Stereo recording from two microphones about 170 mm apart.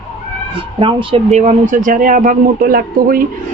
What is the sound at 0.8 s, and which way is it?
Speech, 30° right (ahead or behind).